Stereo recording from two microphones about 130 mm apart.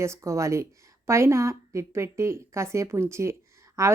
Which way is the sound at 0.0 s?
20° right (ahead or behind).